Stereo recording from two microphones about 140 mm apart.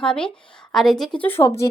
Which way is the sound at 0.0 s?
5° left (ahead or behind).